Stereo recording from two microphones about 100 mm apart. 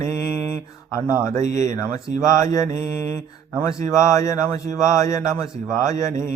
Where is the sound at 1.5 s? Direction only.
30° left (ahead or behind).